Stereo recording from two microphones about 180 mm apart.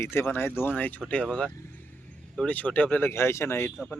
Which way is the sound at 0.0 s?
15° left (ahead or behind).